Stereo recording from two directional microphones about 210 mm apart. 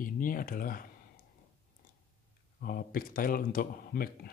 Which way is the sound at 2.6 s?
45° left (ahead or behind).